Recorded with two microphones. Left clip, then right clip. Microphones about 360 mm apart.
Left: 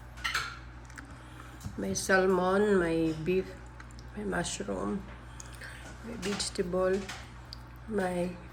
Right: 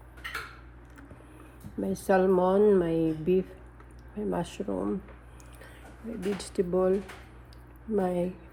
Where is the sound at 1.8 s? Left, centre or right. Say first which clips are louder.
Right 2 dB; centre.